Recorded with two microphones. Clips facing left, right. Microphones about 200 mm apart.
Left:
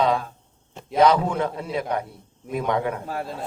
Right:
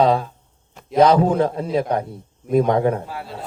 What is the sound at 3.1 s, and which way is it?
Speech, 50° left (ahead or behind).